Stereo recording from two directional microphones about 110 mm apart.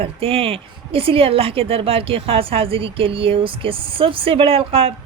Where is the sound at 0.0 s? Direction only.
60° right (ahead or behind).